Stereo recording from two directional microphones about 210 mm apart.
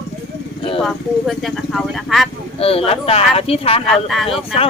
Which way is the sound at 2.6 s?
30° left (ahead or behind).